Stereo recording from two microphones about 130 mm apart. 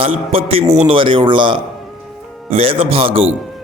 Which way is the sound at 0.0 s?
50° right (ahead or behind).